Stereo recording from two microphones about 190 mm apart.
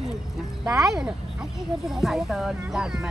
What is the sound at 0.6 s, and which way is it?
Speech, centre (ahead or behind).